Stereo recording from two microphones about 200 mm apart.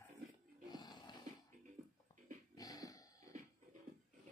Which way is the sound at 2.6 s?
20° left (ahead or behind).